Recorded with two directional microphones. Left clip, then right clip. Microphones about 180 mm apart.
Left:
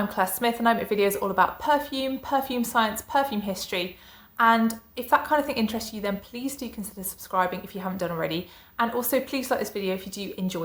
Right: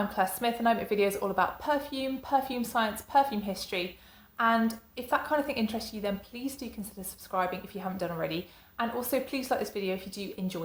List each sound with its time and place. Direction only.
0.1 s a woman's voice: 20° left (ahead or behind)